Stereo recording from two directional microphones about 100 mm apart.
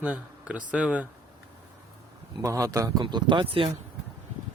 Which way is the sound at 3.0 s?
50° right (ahead or behind).